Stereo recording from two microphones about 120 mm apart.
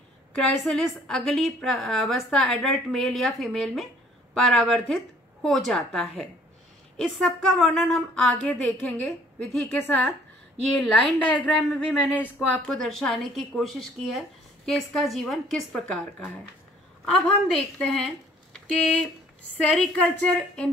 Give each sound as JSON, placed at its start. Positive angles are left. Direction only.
{"t": 0.4, "sound": "a woman's voice", "side_deg": 5}
{"t": 9.7, "sound": "a woman's voice", "side_deg": 20}
{"t": 17.0, "sound": "a woman's voice", "side_deg": 5}